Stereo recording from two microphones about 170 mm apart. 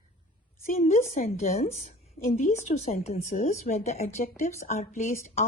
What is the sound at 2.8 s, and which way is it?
A woman's voice, 40° left (ahead or behind).